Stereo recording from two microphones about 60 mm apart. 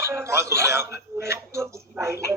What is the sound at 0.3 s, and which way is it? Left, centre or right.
Speech, right.